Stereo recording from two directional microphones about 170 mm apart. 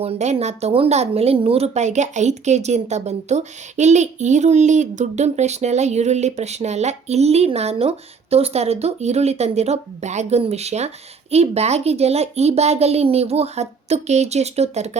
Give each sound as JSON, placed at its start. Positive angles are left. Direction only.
{"t": 0.0, "sound": "a woman's voice", "side_deg": -40}